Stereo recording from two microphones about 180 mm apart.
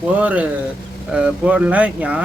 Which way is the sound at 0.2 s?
10° right (ahead or behind).